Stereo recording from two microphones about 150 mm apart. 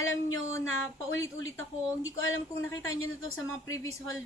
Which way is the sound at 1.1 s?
20° left (ahead or behind).